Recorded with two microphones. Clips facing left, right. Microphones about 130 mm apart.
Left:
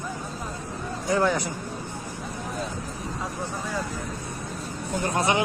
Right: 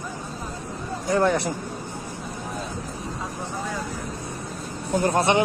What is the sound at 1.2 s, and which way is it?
Speech, 70° right (ahead or behind).